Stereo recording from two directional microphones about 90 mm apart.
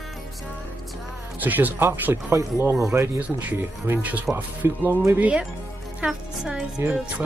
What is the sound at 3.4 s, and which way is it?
Speech, 20° right (ahead or behind).